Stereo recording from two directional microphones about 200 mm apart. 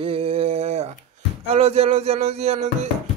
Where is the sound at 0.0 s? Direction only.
30° right (ahead or behind).